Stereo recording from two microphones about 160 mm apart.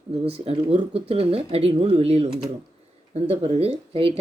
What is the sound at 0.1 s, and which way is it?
Speech, 40° right (ahead or behind).